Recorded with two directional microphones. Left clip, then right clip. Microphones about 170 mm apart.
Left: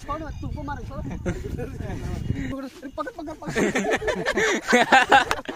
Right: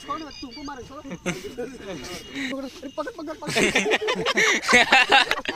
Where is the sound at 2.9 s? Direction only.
Centre (ahead or behind).